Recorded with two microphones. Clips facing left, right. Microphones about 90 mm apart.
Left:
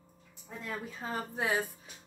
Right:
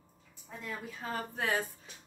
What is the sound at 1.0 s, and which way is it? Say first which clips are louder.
Speech: left 1 dB; 20° left (ahead or behind).